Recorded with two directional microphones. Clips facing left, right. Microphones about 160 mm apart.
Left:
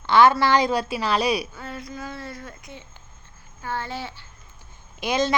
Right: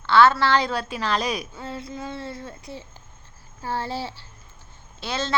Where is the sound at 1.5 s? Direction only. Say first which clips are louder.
Right 2 dB; 25° right (ahead or behind).